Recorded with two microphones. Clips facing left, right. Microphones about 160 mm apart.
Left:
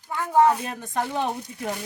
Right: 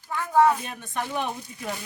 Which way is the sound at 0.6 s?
30° left (ahead or behind).